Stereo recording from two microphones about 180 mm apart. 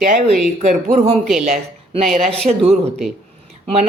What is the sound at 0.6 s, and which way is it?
A man's voice, 40° right (ahead or behind).